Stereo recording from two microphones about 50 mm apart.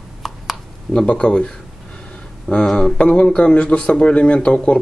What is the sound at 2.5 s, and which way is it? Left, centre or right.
Speech, left.